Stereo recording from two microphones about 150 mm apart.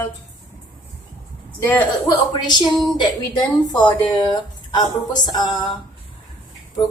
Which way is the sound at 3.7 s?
25° left (ahead or behind).